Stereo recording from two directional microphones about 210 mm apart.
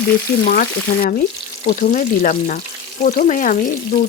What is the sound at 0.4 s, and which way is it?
Speech, 45° left (ahead or behind).